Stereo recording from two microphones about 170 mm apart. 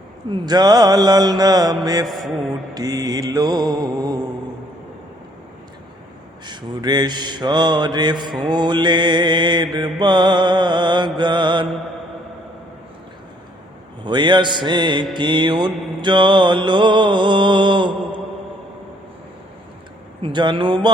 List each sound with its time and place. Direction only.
0.3 s mantra: 25° right (ahead or behind)
2.0 s speech: centre (ahead or behind)
2.7 s mantra: 20° right (ahead or behind)
6.4 s mantra: 25° right (ahead or behind)
14.0 s mantra: 25° right (ahead or behind)
20.2 s mantra: 25° right (ahead or behind)